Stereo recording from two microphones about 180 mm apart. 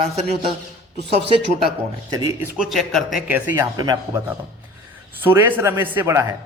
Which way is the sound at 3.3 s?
15° right (ahead or behind).